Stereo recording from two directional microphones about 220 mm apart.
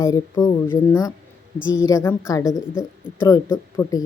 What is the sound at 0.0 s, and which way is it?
A woman's voice, 15° left (ahead or behind).